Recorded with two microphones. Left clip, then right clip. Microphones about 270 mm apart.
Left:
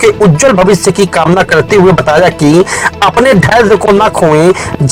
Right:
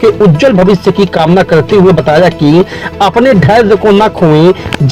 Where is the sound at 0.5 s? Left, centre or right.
Left.